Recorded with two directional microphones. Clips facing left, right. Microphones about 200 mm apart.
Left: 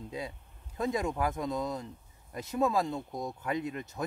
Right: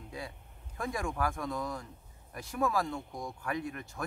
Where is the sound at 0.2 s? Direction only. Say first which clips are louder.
Left 2 dB; 20° left (ahead or behind).